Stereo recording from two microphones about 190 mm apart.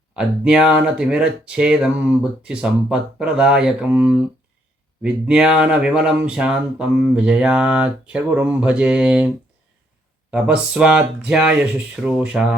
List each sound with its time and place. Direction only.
0.1 s speech: 5° right (ahead or behind)
10.3 s speech: 5° right (ahead or behind)